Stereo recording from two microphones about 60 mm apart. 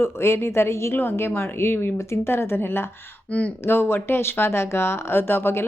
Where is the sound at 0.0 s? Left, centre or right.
Left.